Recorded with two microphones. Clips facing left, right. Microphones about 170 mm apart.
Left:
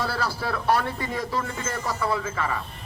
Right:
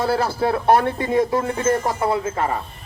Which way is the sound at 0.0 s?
50° right (ahead or behind).